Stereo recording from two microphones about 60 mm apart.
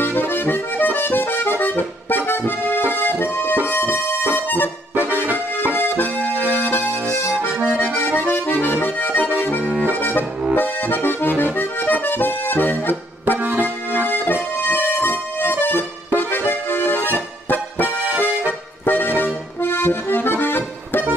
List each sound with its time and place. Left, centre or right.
0.0 s accordion: left
3.6 s music: left
5.2 s accordion: right
5.8 s accordion: left
6.5 s music: left
7.6 s accordion: centre
7.9 s accordion: left
9.6 s accordion: centre
9.9 s accordion: left
13.4 s accordion: right
14.0 s accordion: left
15.6 s music: left
17.8 s accordion: right
18.9 s accordion: left